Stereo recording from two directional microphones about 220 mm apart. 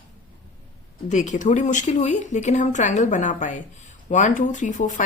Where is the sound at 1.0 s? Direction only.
35° left (ahead or behind).